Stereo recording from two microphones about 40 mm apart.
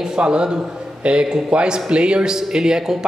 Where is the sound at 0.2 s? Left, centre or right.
Right.